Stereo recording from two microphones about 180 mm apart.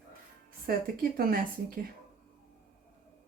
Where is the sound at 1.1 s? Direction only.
50° right (ahead or behind).